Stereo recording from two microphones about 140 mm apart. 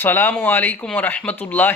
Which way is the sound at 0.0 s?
15° left (ahead or behind).